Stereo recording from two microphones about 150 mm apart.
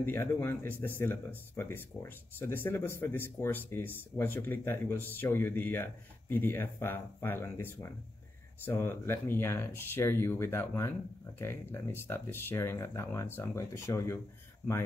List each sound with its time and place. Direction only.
0.0 s speech: 15° left (ahead or behind)